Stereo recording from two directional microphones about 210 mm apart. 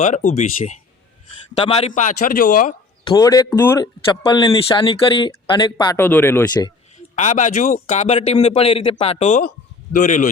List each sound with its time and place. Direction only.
0.0 s a man's voice: 35° left (ahead or behind)
1.9 s a man's voice: 40° left (ahead or behind)
3.0 s speech: 20° left (ahead or behind)
7.2 s a man's voice: 35° left (ahead or behind)